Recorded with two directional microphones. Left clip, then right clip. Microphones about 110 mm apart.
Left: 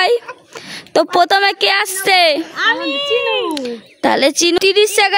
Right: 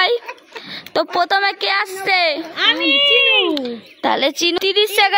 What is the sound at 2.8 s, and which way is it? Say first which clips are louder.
Speech: right 5 dB; 10° left (ahead or behind).